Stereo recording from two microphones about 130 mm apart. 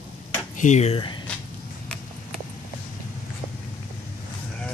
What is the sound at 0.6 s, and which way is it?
Speech, 65° left (ahead or behind).